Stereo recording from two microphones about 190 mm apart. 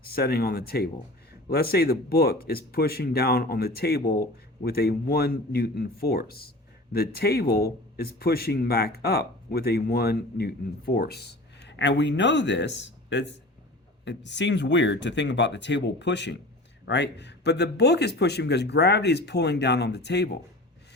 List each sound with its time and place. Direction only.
0.0 s speech: 55° left (ahead or behind)